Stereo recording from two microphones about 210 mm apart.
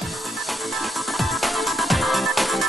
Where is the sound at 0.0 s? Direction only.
Centre (ahead or behind).